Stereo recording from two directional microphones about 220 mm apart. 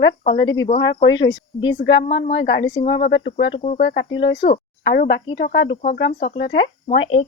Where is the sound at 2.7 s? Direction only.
20° left (ahead or behind).